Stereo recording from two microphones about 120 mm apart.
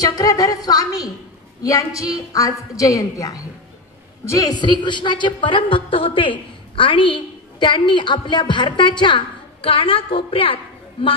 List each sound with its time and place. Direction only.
0.0 s a woman's voice: 30° left (ahead or behind); by 11.1 s 50° left (ahead or behind)